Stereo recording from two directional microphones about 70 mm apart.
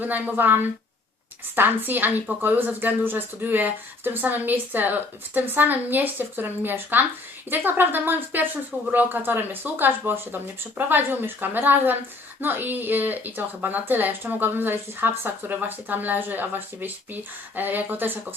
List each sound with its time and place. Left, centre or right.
0.0 s speech: right